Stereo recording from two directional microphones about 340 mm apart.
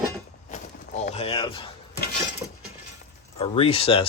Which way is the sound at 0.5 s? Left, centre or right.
Left.